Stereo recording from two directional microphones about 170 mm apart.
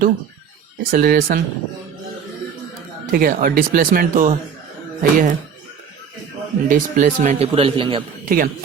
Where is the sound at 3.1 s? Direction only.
55° right (ahead or behind).